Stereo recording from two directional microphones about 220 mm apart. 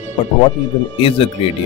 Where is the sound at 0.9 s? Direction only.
25° left (ahead or behind).